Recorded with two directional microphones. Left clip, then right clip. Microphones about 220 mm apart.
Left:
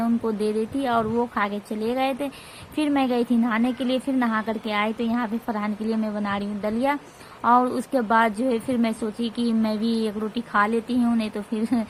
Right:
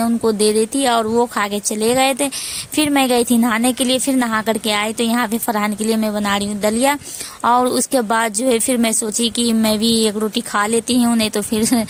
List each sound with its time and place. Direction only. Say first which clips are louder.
0.0 s a woman's voice: right 9 dB; 50° right (ahead or behind)